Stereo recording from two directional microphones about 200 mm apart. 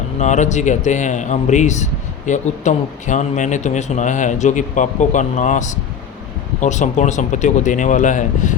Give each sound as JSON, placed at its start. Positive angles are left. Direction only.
{"t": 0.2, "sound": "a man's voice", "side_deg": 35}